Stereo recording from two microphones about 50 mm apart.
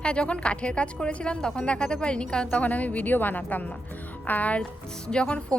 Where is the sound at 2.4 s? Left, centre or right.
Left.